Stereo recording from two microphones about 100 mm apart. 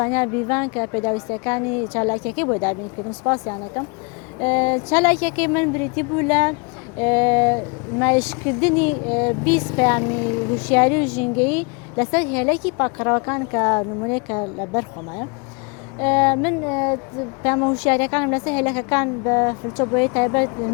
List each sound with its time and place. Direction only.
0.0 s a woman's voice: 20° left (ahead or behind)